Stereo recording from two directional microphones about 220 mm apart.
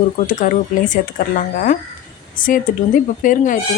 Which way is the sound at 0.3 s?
35° left (ahead or behind).